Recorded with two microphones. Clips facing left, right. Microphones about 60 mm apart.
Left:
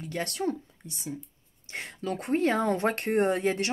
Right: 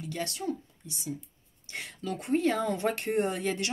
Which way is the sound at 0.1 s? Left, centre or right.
Left.